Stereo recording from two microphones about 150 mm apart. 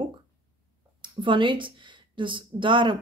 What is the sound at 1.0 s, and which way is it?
Speech, 35° right (ahead or behind).